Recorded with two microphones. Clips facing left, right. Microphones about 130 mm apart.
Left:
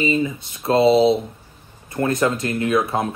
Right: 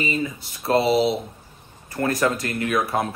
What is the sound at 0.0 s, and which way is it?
Speech, 25° left (ahead or behind).